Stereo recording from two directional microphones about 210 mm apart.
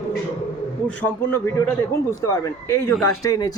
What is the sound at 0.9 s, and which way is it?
Speech, 10° left (ahead or behind).